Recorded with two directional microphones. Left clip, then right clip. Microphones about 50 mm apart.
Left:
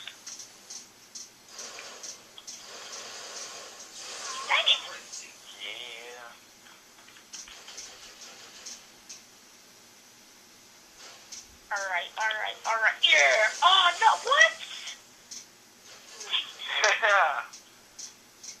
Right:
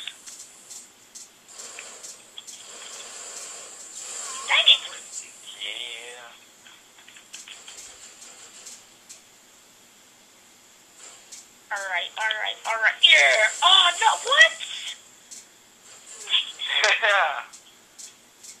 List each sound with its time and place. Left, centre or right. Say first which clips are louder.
3.1 s snake: right 1 dB; centre
4.5 s television: right 7 dB; right
5.5 s a sound: right 6 dB; right
11.7 s telephone: right 3 dB; right
12.9 s a sound: right 6 dB; right
16.3 s telephone: right 7 dB; right